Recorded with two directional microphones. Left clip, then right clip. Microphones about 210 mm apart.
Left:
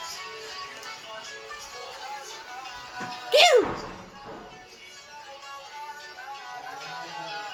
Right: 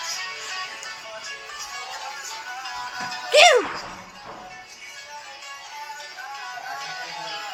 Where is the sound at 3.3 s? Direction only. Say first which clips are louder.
Right 4 dB; 25° right (ahead or behind).